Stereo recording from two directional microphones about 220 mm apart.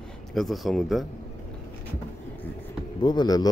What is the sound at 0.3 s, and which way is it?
Speech, centre (ahead or behind).